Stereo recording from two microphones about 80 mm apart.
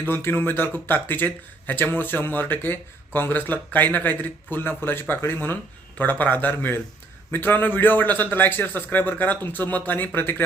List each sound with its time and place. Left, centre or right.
0.0 s speech: left